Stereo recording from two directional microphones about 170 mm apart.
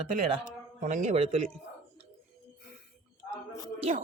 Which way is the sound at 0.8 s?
45° right (ahead or behind).